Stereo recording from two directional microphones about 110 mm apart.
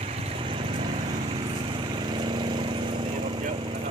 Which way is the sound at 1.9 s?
45° right (ahead or behind).